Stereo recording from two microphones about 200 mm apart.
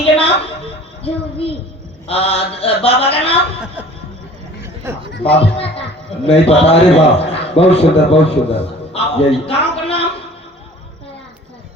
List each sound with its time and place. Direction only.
0.0 s a sound: 30° left (ahead or behind)
1.0 s mantra: 30° left (ahead or behind)
4.6 s a sound: 10° right (ahead or behind)
5.1 s speech: 55° left (ahead or behind)
5.4 s mantra: 30° left (ahead or behind)
6.2 s a man's voice: 30° left (ahead or behind)